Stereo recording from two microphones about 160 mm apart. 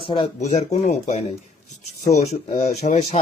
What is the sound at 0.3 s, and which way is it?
Speech, 45° left (ahead or behind).